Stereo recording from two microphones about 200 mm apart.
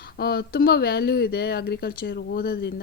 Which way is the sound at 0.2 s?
50° left (ahead or behind).